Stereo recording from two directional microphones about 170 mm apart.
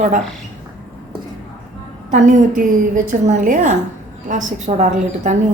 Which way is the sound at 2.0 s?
50° right (ahead or behind).